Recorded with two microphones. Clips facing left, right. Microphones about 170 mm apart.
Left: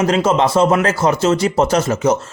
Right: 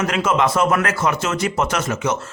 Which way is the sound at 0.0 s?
35° left (ahead or behind).